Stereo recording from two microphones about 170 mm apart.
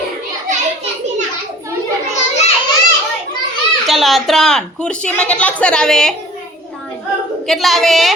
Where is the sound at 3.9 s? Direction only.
Centre (ahead or behind).